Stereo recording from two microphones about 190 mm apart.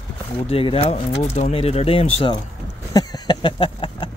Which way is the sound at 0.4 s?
30° left (ahead or behind).